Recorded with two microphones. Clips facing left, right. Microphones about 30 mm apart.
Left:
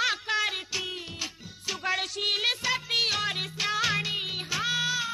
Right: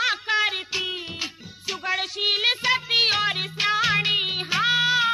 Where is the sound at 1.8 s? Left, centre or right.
Centre.